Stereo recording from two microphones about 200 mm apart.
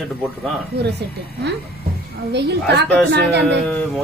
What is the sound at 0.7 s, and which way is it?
Speech, 55° right (ahead or behind).